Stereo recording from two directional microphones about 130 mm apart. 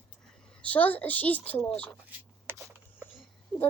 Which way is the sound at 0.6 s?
10° left (ahead or behind).